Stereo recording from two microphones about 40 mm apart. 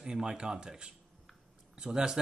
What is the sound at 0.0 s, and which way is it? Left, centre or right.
Speech, centre.